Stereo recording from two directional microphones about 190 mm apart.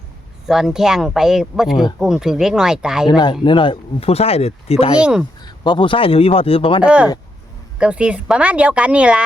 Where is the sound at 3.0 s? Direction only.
20° left (ahead or behind).